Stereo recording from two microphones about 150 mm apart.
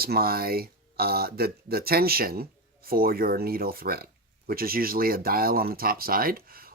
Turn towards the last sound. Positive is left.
turn(degrees=-75)  # may be behind; listen again after turning